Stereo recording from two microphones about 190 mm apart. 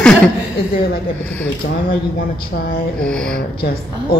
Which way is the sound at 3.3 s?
50° left (ahead or behind).